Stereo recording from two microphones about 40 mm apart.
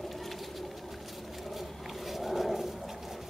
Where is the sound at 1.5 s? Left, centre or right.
Centre.